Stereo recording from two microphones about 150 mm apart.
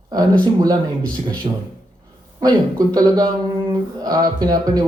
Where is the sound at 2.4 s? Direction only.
25° right (ahead or behind).